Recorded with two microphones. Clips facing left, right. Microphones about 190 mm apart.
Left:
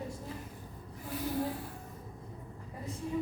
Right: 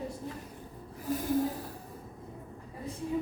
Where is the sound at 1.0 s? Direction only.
45° right (ahead or behind).